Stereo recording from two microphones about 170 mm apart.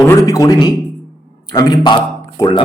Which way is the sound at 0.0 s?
20° left (ahead or behind).